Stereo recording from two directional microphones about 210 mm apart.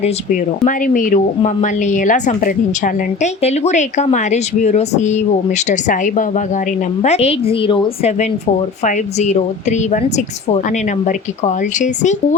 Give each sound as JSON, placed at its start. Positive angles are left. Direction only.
{"t": 0.0, "sound": "a woman's voice", "side_deg": 35}